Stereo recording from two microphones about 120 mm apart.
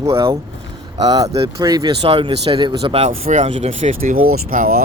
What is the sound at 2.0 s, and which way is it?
Speech, 45° right (ahead or behind).